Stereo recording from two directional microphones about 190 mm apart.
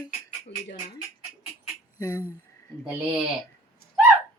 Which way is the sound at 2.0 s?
20° left (ahead or behind).